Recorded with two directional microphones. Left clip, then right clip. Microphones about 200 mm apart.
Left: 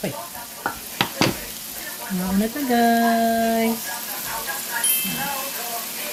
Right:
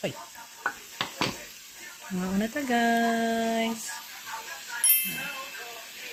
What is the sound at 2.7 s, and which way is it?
Speech, 40° right (ahead or behind).